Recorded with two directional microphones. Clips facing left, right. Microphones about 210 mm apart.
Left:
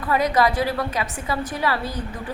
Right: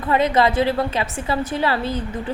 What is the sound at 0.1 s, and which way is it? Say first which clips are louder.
A woman's voice: right 2 dB; 25° right (ahead or behind).